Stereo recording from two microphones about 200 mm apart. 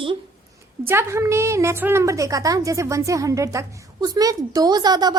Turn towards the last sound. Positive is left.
turn(degrees=-20)  # may be behind; listen again after turning